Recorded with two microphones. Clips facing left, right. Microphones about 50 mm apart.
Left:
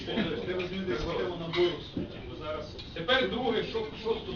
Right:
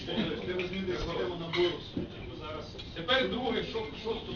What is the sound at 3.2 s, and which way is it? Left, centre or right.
Speech, centre.